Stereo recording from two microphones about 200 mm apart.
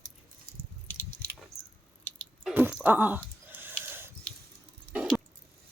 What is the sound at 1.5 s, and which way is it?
Squish, centre (ahead or behind).